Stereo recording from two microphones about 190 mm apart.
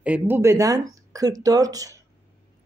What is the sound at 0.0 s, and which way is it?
Speech, 10° right (ahead or behind).